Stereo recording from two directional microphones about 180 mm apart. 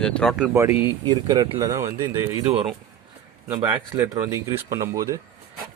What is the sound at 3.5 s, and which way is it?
Speech, 20° right (ahead or behind).